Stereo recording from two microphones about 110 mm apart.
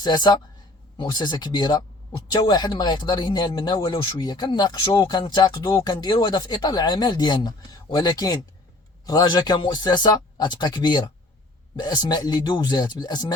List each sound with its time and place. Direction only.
0.0 s speech: 40° left (ahead or behind)